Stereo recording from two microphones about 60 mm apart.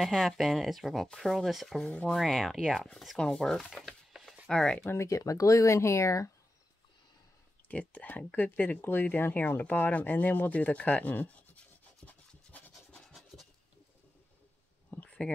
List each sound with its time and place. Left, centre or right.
0.0 s speech: centre
3.7 s chopping: centre
4.5 s speech: centre
4.8 s speech: left
7.9 s speech: left
12.5 s scratch: left
12.9 s scratch: centre
14.9 s a sound: left